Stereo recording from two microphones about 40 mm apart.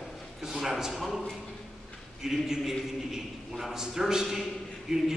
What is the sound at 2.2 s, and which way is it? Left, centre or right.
A man's voice, centre.